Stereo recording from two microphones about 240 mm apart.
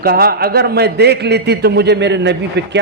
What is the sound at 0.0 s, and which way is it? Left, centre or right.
A man's voice, right.